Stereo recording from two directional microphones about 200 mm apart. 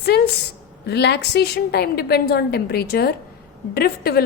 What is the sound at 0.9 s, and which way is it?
A woman's voice, 55° left (ahead or behind).